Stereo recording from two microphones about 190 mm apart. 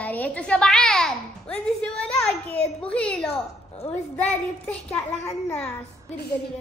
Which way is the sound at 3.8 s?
35° left (ahead or behind).